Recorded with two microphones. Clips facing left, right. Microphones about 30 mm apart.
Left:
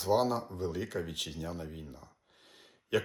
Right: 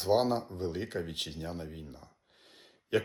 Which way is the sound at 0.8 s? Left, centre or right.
Right.